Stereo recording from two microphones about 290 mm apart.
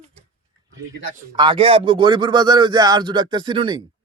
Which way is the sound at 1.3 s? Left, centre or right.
Centre.